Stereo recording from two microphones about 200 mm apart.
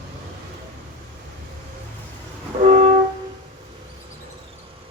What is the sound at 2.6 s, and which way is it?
Music, 35° right (ahead or behind).